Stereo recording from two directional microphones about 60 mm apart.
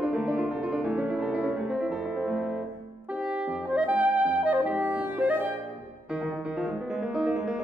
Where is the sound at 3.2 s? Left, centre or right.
Right.